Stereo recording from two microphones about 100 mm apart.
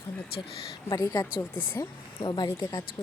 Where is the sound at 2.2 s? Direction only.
50° left (ahead or behind).